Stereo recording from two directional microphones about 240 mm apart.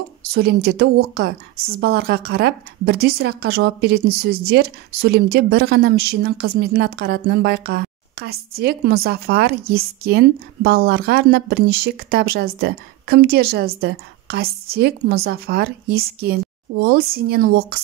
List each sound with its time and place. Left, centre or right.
0.3 s a woman's voice: right